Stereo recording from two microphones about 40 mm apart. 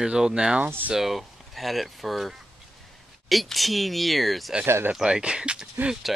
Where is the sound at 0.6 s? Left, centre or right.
Right.